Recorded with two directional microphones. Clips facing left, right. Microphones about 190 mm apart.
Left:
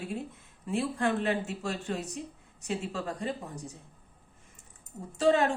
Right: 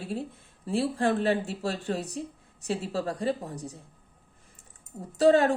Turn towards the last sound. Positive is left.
turn(degrees=-35)  # may be behind; listen again after turning